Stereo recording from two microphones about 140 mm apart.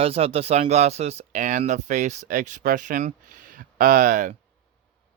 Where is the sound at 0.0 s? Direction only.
45° right (ahead or behind); by 4.4 s 65° right (ahead or behind).